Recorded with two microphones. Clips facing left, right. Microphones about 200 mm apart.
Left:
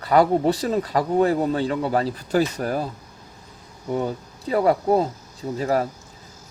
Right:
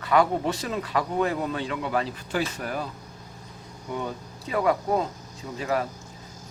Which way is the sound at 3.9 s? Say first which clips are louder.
Left 7 dB; 35° left (ahead or behind).